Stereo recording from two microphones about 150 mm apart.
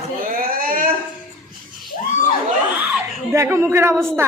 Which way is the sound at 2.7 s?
10° right (ahead or behind).